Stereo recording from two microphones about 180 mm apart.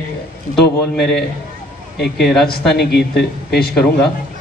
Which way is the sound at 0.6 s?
65° left (ahead or behind).